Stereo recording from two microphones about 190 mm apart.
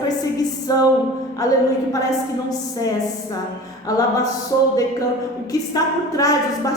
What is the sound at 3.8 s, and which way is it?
Speech, 20° left (ahead or behind).